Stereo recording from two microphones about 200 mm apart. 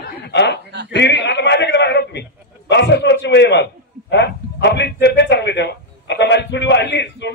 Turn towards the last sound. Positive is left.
turn(degrees=60)  # may be behind; listen again after turning